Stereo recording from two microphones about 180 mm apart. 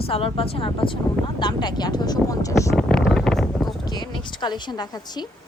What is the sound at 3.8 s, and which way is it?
Speech, 25° left (ahead or behind).